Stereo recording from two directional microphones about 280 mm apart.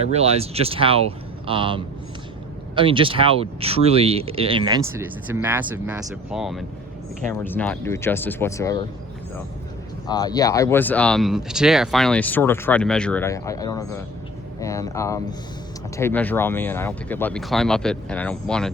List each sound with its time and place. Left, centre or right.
0.0 s speech: right; by 8.8 s centre
10.1 s speech: centre